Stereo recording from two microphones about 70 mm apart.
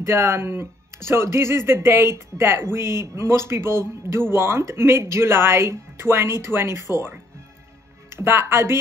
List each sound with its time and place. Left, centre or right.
0.0 s speech: right
8.1 s speech: right